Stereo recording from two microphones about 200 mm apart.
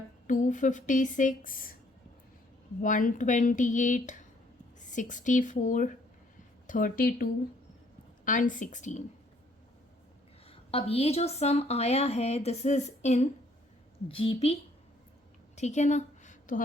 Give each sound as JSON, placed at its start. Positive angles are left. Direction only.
{"t": 0.3, "sound": "a woman's voice", "side_deg": 40}
{"t": 2.8, "sound": "a woman's voice", "side_deg": 40}
{"t": 10.4, "sound": "a woman's voice", "side_deg": 30}
{"t": 15.5, "sound": "a sound", "side_deg": 35}